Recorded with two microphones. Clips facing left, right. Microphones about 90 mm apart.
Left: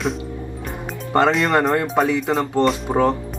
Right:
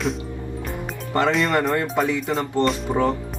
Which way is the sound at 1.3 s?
Centre (ahead or behind).